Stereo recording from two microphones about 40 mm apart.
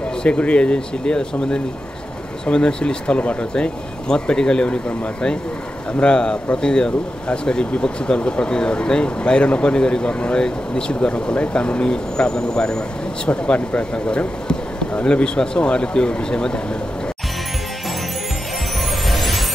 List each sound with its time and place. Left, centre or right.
0.2 s speech: left
3.2 s speech: left
3.5 s speech: left
19.0 s music: centre